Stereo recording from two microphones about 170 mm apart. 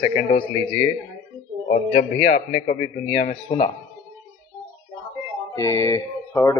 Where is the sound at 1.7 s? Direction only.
50° left (ahead or behind).